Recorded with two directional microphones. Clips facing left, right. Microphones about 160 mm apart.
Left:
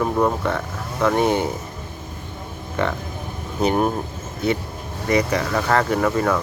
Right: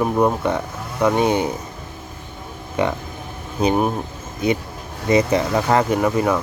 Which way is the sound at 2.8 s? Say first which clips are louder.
Right 2 dB; 15° right (ahead or behind).